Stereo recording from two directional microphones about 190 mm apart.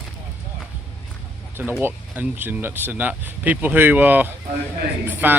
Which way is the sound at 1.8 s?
10° right (ahead or behind).